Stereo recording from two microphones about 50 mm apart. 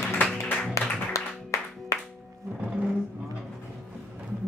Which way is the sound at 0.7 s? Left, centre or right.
Left.